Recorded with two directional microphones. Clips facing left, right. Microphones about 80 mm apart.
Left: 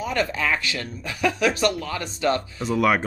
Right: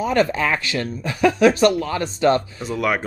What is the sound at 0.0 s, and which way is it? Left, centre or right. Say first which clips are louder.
Speech: right 6 dB; right.